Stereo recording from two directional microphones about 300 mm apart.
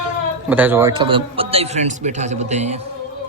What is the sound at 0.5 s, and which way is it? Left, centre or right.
A man's voice, centre.